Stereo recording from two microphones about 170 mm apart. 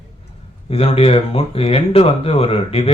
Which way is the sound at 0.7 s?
35° left (ahead or behind).